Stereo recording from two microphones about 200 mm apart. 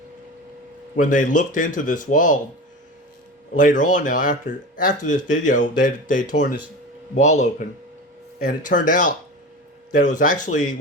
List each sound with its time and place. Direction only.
0.9 s speech: 40° left (ahead or behind)
3.5 s speech: 40° left (ahead or behind)
8.4 s speech: 40° left (ahead or behind)